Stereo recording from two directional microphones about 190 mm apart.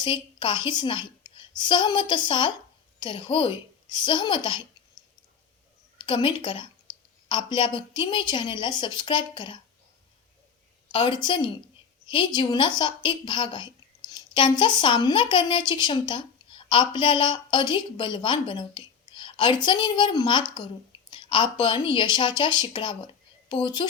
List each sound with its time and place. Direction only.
0.0 s a woman's voice: 25° left (ahead or behind)
6.0 s a woman's voice: 25° left (ahead or behind)
10.9 s a woman's voice: 25° left (ahead or behind)